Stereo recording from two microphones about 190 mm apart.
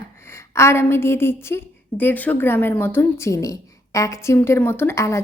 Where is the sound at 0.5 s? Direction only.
15° left (ahead or behind).